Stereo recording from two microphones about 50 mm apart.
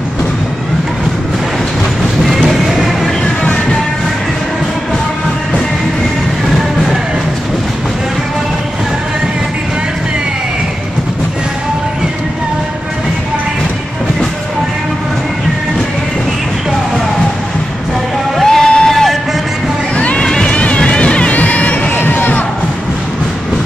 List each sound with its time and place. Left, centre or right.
2.2 s music: centre
18.4 s a sound: centre
20.0 s music: left
21.9 s crowd: left